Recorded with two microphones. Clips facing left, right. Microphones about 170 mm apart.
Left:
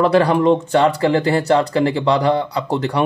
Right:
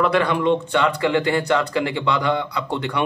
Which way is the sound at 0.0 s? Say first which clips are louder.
Left 5 dB; 35° left (ahead or behind).